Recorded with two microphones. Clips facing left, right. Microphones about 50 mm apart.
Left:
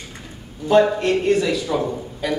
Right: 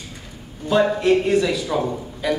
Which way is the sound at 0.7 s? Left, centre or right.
Centre.